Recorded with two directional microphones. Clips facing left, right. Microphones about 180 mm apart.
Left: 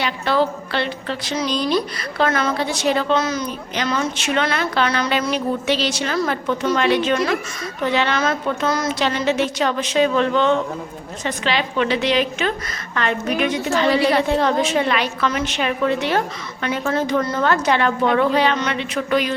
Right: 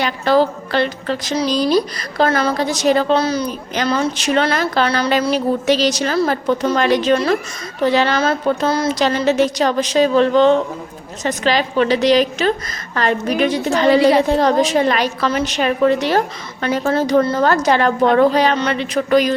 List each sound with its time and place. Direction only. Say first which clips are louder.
0.0 s a woman's voice: right 4 dB; 40° right (ahead or behind)